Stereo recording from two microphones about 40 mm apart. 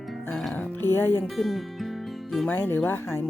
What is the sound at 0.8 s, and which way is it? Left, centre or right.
Speech, left.